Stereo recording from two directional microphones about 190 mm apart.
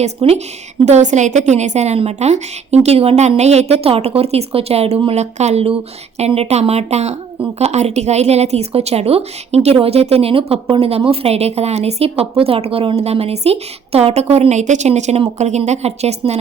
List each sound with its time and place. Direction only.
0.0 s a woman's voice: 35° right (ahead or behind)